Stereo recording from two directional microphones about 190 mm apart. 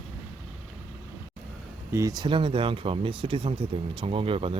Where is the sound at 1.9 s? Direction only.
20° right (ahead or behind).